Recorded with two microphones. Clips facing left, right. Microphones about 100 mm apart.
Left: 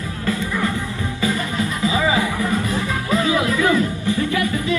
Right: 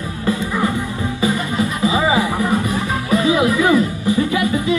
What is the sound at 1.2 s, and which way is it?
Music, 20° right (ahead or behind).